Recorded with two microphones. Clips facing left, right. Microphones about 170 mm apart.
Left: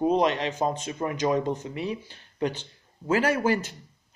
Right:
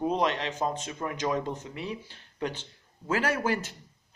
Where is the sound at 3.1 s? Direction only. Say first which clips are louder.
Left 4 dB; 5° left (ahead or behind).